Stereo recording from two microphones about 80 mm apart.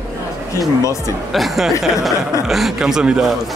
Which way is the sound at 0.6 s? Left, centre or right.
Left.